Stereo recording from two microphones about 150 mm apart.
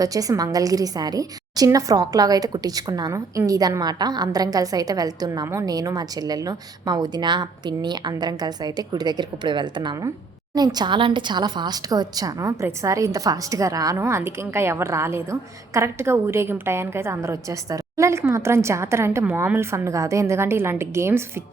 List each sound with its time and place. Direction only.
0.0 s a woman's voice: 25° right (ahead or behind)